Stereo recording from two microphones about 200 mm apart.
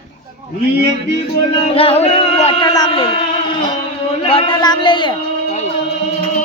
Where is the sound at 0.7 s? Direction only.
55° right (ahead or behind).